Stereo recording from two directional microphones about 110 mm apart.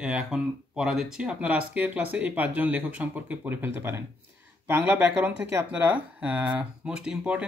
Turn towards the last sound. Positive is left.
turn(degrees=-10)  # may be behind; listen again after turning